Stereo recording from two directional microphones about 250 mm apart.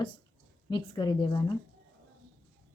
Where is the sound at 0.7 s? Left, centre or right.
Centre.